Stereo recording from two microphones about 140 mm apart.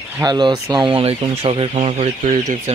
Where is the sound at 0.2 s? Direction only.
30° right (ahead or behind).